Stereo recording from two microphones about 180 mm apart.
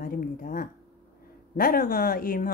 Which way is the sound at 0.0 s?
50° left (ahead or behind).